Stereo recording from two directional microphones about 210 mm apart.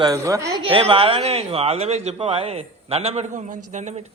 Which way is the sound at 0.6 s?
25° right (ahead or behind).